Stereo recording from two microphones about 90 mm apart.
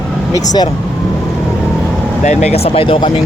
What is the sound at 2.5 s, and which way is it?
Speech, 90° left.